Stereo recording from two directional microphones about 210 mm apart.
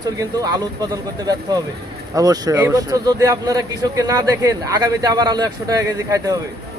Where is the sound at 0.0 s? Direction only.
15° right (ahead or behind).